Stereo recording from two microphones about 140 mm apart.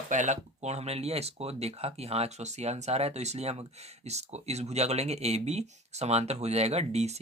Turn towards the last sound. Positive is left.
turn(degrees=-50)  # may be behind; listen again after turning